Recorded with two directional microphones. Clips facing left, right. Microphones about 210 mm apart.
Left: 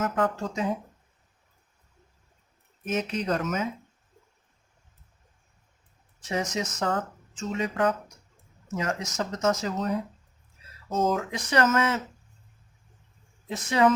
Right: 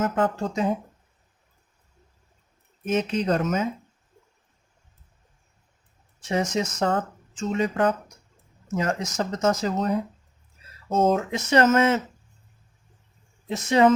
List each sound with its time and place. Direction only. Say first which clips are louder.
0.0 s speech: right 3 dB; 25° right (ahead or behind)
2.8 s speech: right 5 dB; 25° right (ahead or behind)
6.2 s speech: right 4 dB; 30° right (ahead or behind)
11.0 s speech: right 4 dB; 25° right (ahead or behind)
13.5 s speech: right 4 dB; 25° right (ahead or behind)